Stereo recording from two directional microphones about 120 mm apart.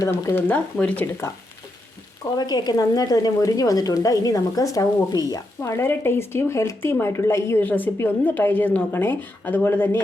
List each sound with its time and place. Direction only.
0.0 s a woman's voice: 20° left (ahead or behind)
2.3 s a woman's voice: 35° left (ahead or behind); by 10.0 s 20° left (ahead or behind)